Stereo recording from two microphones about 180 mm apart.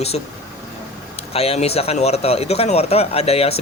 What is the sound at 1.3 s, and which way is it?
Speech, 35° left (ahead or behind).